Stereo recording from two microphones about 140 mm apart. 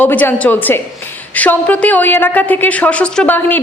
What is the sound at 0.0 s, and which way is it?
A woman's voice, 15° left (ahead or behind).